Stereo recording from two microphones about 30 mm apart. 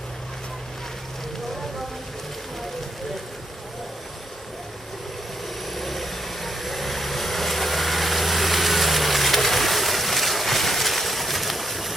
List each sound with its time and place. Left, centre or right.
5.6 s vehicle: centre